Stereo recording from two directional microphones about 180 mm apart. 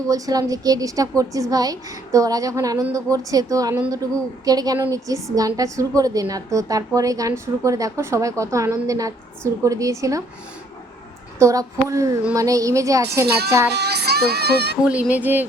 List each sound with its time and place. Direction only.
0.1 s a woman's voice: 20° right (ahead or behind)
11.3 s a woman's voice: 15° right (ahead or behind)
13.2 s speech: 65° right (ahead or behind)
14.8 s a woman's voice: 5° right (ahead or behind)